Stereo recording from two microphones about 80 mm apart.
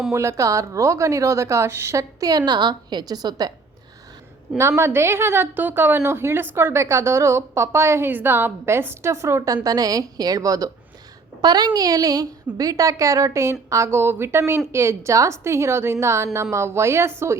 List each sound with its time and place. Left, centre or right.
0.1 s a woman's voice: right
2.4 s a woman's voice: right
4.8 s a woman's voice: right
9.6 s a woman's voice: right
11.3 s a woman's voice: right